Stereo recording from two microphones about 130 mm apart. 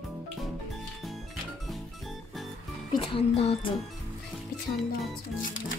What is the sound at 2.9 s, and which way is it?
Music, 40° left (ahead or behind).